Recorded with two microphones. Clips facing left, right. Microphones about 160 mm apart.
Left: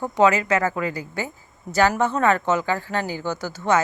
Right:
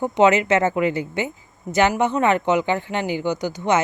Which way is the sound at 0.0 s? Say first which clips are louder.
Right 2 dB; 25° right (ahead or behind).